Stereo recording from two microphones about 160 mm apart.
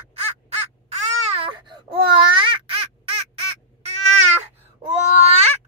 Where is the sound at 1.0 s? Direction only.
40° right (ahead or behind).